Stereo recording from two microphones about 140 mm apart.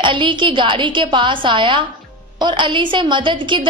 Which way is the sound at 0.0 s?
35° right (ahead or behind).